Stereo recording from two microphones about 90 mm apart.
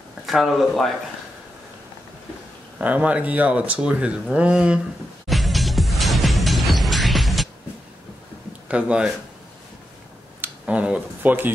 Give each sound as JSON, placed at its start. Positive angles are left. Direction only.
{"t": 0.3, "sound": "speech", "side_deg": 0}
{"t": 2.8, "sound": "speech", "side_deg": -15}
{"t": 5.3, "sound": "music", "side_deg": 0}
{"t": 8.6, "sound": "speech", "side_deg": -15}
{"t": 10.4, "sound": "speech", "side_deg": -15}